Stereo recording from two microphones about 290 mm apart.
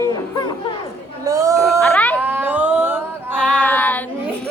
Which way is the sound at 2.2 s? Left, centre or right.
Centre.